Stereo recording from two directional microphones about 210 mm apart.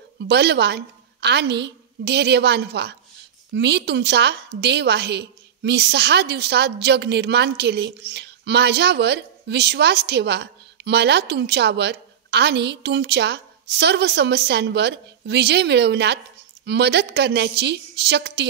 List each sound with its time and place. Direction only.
0.2 s a woman's voice: 55° right (ahead or behind)